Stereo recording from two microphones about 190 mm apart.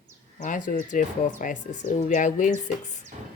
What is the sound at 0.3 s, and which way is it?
Speech, 45° left (ahead or behind).